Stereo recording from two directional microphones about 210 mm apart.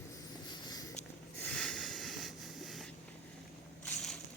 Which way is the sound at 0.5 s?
20° left (ahead or behind).